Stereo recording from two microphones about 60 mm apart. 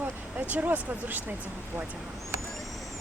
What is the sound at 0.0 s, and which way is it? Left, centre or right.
Speech, right.